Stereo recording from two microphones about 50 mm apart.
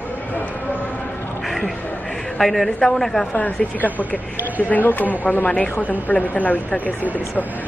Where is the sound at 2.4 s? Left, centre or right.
Centre.